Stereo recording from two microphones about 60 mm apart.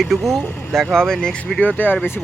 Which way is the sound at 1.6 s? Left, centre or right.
Left.